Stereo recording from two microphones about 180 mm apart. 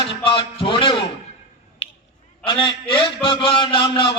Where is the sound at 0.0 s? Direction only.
30° left (ahead or behind).